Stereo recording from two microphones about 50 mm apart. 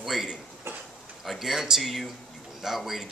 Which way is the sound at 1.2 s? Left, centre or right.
Centre.